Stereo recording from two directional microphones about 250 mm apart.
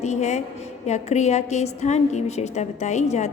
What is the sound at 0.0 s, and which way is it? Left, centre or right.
A woman's voice, left.